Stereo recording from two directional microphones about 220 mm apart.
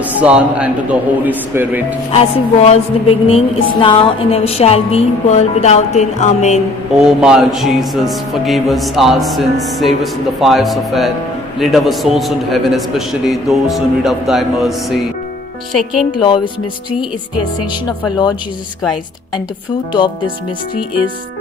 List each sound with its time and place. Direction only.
0.0 s a man's voice: 5° right (ahead or behind)
2.3 s speech: 25° left (ahead or behind)
7.0 s music: 5° right (ahead or behind)
16.2 s speech: 20° left (ahead or behind)
19.9 s speech: 20° left (ahead or behind)